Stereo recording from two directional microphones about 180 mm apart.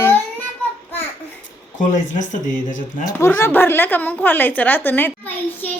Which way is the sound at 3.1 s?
15° left (ahead or behind).